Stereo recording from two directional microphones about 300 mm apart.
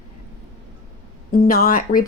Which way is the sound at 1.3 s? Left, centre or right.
Left.